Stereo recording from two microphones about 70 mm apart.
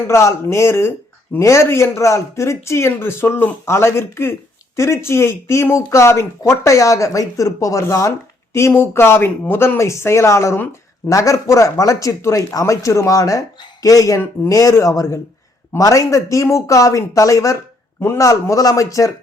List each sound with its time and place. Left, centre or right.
0.1 s a man's voice: left